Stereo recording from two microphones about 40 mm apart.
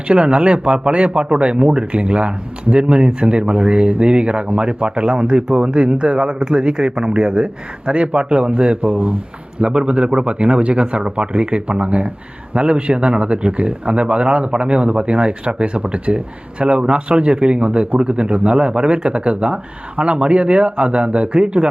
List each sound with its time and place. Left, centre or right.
0.1 s speech: right